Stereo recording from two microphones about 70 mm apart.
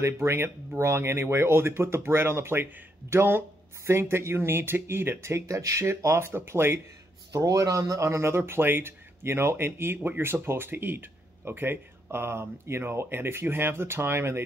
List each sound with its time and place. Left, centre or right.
0.0 s speech: right
7.3 s speech: right